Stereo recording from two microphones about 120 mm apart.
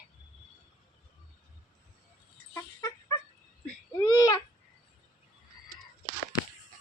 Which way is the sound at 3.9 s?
30° left (ahead or behind).